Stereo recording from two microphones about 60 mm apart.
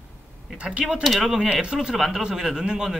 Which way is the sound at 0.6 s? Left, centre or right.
Centre.